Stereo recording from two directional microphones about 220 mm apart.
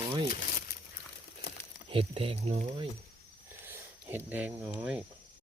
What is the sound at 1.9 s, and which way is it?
Speech, 25° right (ahead or behind).